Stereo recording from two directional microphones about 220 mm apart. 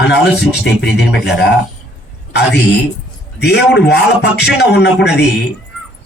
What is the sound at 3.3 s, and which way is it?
A man's voice, 50° left (ahead or behind).